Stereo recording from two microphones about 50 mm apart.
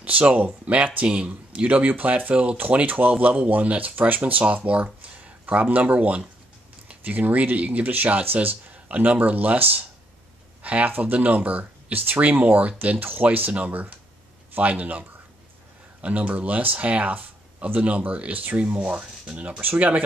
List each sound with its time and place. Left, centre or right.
0.0 s speech: right
13.0 s speech: right
13.5 s speech: right